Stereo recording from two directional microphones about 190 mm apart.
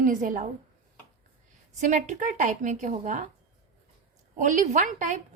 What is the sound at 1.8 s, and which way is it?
A woman's voice, 40° right (ahead or behind).